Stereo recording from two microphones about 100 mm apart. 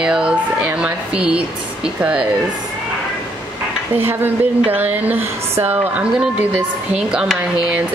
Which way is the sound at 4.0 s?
20° right (ahead or behind).